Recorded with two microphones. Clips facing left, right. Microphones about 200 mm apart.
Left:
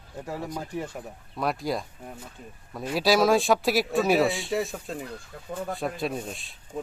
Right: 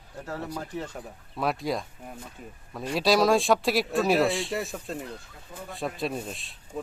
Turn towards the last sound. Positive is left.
turn(degrees=0)  # may be behind; listen again after turning